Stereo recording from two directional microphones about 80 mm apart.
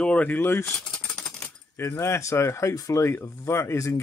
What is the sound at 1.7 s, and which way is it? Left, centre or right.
Speech, left.